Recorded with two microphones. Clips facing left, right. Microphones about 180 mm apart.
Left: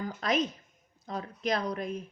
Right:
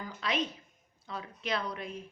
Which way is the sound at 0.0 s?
45° left (ahead or behind).